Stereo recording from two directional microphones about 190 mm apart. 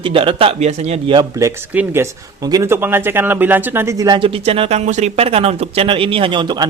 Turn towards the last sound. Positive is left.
turn(degrees=-25)  # may be behind; listen again after turning